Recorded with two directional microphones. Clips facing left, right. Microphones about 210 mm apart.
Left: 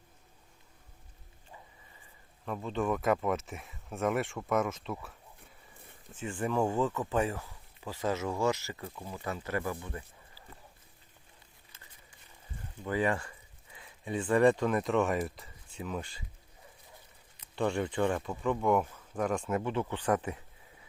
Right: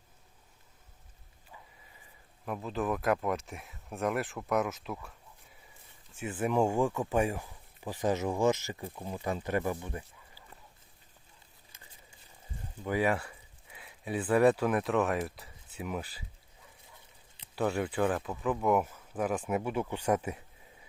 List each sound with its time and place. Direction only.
2.4 s speech: 5° right (ahead or behind)
6.1 s speech: 5° right (ahead or behind)
12.8 s speech: 10° right (ahead or behind)
17.5 s speech: 5° right (ahead or behind)